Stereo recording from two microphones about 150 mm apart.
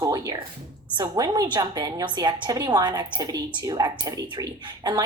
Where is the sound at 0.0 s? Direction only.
25° right (ahead or behind).